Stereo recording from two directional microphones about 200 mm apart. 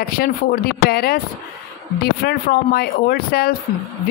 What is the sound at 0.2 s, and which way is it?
Speech, 50° left (ahead or behind).